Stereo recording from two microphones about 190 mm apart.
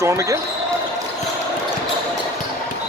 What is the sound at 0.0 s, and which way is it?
Speech, 15° right (ahead or behind).